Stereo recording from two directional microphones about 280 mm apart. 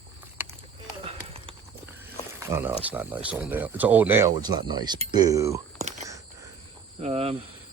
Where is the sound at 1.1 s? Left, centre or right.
Right.